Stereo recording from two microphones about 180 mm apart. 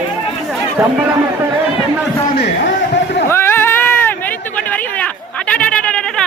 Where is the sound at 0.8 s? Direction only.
15° right (ahead or behind).